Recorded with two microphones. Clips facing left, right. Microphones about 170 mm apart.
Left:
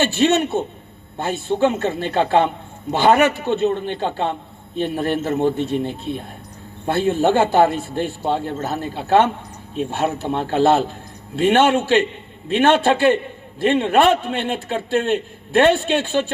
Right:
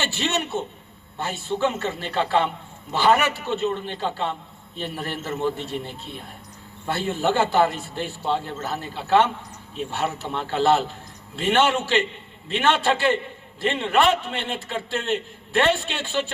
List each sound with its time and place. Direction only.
0.0 s a man's voice: 50° left (ahead or behind)